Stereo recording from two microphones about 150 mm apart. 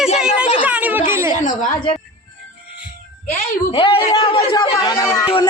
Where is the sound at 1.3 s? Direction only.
60° left (ahead or behind).